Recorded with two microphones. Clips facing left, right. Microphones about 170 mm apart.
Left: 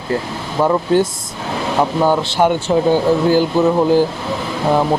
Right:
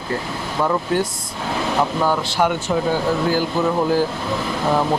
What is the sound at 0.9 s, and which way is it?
Speech, 30° left (ahead or behind).